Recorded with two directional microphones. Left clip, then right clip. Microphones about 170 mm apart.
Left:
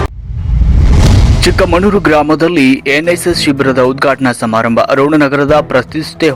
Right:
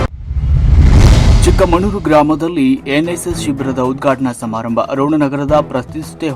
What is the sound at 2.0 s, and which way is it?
Speech, 20° left (ahead or behind).